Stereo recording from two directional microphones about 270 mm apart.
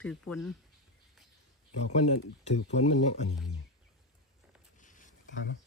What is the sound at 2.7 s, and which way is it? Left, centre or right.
Speech, left.